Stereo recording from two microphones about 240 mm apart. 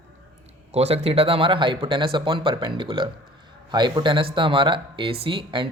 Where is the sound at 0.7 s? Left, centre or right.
Right.